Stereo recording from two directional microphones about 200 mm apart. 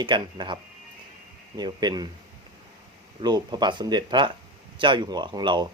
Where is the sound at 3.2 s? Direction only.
20° right (ahead or behind).